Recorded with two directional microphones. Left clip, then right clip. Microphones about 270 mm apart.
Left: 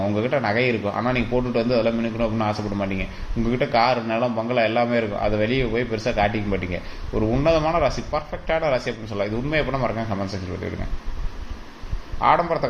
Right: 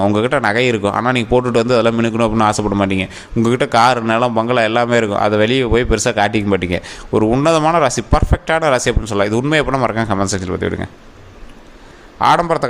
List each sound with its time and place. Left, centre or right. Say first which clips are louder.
0.1 s speech: right 7 dB; right
12.2 s speech: right 6 dB; right